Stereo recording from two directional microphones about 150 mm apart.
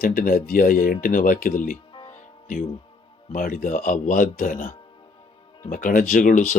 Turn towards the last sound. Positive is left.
turn(degrees=60)  # may be behind; listen again after turning